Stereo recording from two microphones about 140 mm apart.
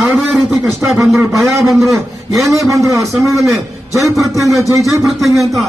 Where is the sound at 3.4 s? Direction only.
20° right (ahead or behind).